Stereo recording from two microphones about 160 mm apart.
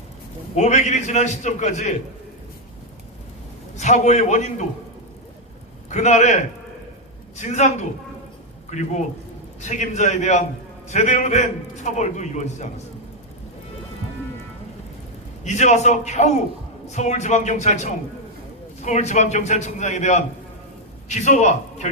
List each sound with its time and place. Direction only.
0.5 s a man's voice: 45° left (ahead or behind)
3.8 s a man's voice: 45° left (ahead or behind)
5.9 s a man's voice: 45° left (ahead or behind)
15.4 s a man's voice: 45° left (ahead or behind)